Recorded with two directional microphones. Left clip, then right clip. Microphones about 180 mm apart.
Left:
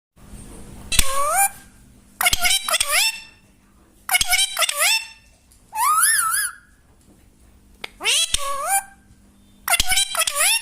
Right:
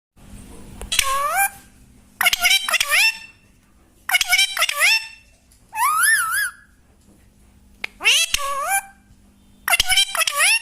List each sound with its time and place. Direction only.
0.9 s cat: 20° left (ahead or behind)
2.1 s a sound: 20° left (ahead or behind)
7.8 s cat: 15° left (ahead or behind)
9.6 s music: 15° left (ahead or behind)